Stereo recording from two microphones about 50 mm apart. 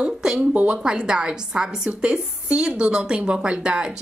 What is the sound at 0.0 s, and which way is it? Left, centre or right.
Speech, centre.